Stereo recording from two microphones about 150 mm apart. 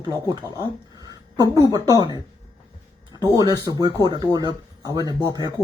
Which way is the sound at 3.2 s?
25° right (ahead or behind).